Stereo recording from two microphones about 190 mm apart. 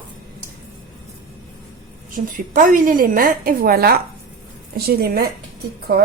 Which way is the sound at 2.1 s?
45° right (ahead or behind).